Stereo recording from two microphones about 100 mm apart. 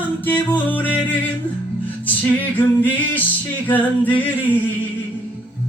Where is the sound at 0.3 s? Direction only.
15° left (ahead or behind).